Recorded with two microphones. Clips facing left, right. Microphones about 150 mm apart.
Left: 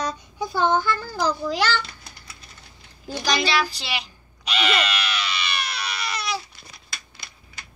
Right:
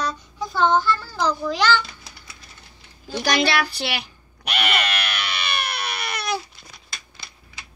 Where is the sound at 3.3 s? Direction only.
60° right (ahead or behind).